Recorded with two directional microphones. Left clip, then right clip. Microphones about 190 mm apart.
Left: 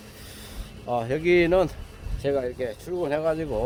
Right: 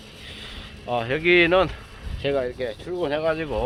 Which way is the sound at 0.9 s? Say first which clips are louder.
Right 2 dB; 15° left (ahead or behind).